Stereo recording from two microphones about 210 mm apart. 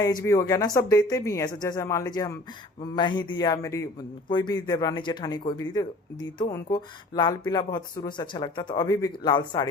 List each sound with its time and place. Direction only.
0.0 s speech: 15° left (ahead or behind)